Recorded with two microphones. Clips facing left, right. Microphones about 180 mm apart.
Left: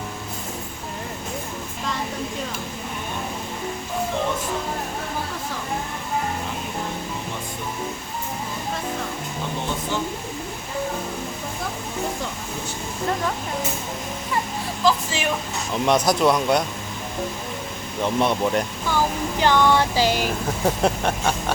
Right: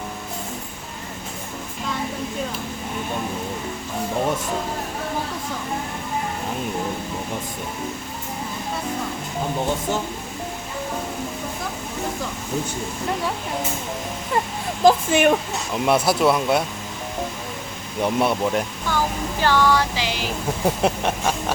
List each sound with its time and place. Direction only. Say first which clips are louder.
14.8 s speech: right 7 dB; 55° right (ahead or behind)
15.7 s speech: even; 5° right (ahead or behind)
18.0 s speech: right 1 dB; 5° right (ahead or behind)
18.9 s a sound: left 2 dB; 15° left (ahead or behind)
20.0 s speech: left 6 dB; 45° left (ahead or behind)
20.7 s speech: even; 5° right (ahead or behind)